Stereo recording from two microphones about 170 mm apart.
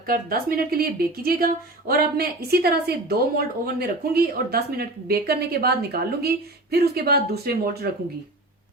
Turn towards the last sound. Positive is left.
turn(degrees=-65)  # may be behind; listen again after turning